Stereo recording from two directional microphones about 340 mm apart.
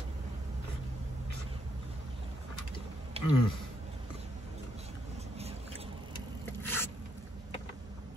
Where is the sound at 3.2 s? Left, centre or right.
Centre.